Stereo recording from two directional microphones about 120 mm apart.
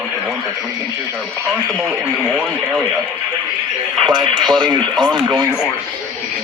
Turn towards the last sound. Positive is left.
turn(degrees=-40)  # may be behind; listen again after turning